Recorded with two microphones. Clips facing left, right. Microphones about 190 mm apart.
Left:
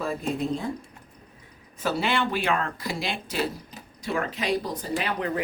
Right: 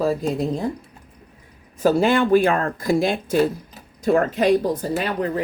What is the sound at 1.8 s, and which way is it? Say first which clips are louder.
Speech: right 9 dB; 45° right (ahead or behind).